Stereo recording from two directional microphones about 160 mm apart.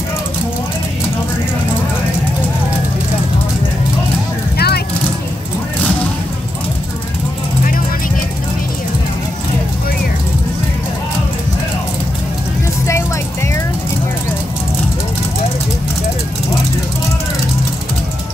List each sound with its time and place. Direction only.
4.6 s vehicle: 80° left